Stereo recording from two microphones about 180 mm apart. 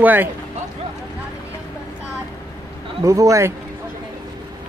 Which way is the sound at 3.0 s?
20° right (ahead or behind).